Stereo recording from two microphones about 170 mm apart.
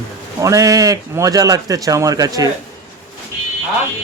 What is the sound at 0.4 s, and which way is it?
A man's voice, 20° right (ahead or behind).